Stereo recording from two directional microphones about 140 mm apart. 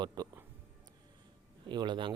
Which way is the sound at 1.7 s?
35° right (ahead or behind).